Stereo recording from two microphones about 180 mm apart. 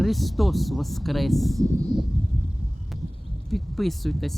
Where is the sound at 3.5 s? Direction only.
Centre (ahead or behind).